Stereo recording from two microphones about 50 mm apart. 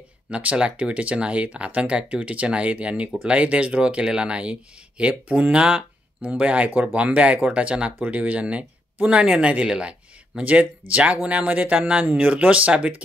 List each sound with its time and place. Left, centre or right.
0.3 s speech: right
10.4 s speech: right